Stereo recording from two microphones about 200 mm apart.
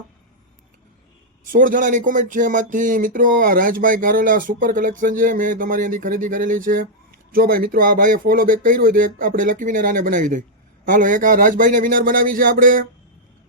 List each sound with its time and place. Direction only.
1.5 s speech: 40° right (ahead or behind)